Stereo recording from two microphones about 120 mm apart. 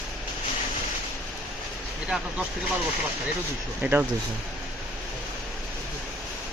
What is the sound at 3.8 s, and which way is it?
Speech, 15° right (ahead or behind).